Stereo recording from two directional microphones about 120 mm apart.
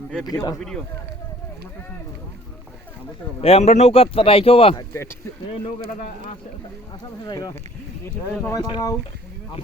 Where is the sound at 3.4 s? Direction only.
60° left (ahead or behind).